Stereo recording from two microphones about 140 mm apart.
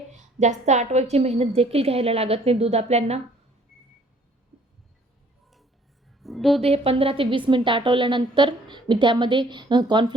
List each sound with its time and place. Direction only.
0.1 s a woman's voice: 55° right (ahead or behind)
6.2 s a woman's voice: centre (ahead or behind)
6.6 s a woman's voice: 45° right (ahead or behind)